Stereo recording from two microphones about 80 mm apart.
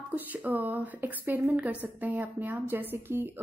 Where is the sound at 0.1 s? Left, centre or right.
Right.